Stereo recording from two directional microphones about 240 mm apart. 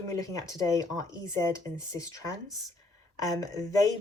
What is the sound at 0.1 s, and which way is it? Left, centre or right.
Speech, centre.